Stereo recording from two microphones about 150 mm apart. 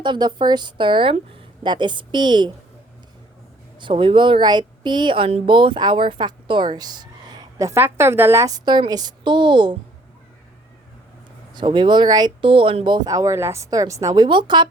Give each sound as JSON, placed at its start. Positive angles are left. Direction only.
{"t": 0.0, "sound": "a woman's voice", "side_deg": -30}
{"t": 3.8, "sound": "speech", "side_deg": -35}
{"t": 11.5, "sound": "speech", "side_deg": -30}